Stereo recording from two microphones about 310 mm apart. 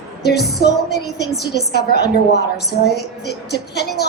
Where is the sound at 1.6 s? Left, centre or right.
Left.